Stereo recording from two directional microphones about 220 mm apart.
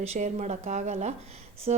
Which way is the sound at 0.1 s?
30° right (ahead or behind).